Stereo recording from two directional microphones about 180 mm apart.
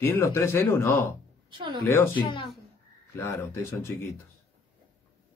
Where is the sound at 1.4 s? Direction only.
25° right (ahead or behind).